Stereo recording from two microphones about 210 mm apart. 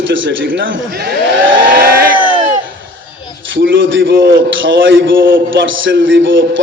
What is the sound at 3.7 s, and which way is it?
A man's voice, 65° right (ahead or behind).